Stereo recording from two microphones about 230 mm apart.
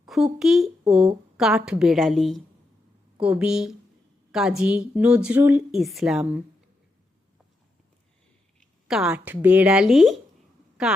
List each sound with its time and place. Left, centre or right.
0.0 s a woman's voice: centre
8.9 s a woman's voice: centre